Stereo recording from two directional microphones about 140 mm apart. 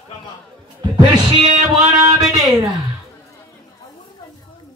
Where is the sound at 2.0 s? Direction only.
20° right (ahead or behind).